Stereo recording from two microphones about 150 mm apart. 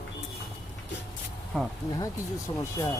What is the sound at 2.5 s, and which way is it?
Speech, 35° left (ahead or behind).